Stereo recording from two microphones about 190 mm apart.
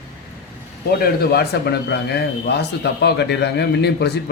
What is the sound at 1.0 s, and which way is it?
A man's voice, 55° left (ahead or behind).